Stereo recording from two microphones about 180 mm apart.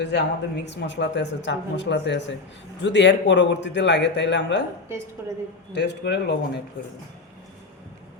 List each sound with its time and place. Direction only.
0.1 s speech: 70° left (ahead or behind)
5.2 s a woman's voice: 15° right (ahead or behind)
5.7 s speech: 65° left (ahead or behind)